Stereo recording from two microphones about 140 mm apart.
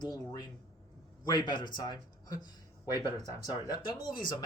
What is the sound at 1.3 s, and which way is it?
A man's voice, 30° left (ahead or behind).